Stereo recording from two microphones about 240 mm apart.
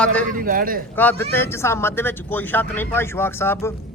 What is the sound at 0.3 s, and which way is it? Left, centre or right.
Speech, right.